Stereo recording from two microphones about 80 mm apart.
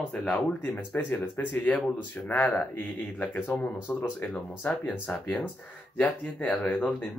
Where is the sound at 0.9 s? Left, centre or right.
Left.